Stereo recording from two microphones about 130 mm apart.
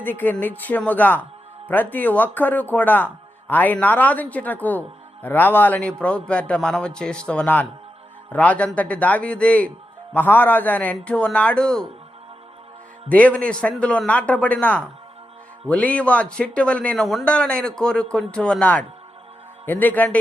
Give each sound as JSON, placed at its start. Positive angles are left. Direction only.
{"t": 0.0, "sound": "speech", "side_deg": 15}
{"t": 13.1, "sound": "speech", "side_deg": 10}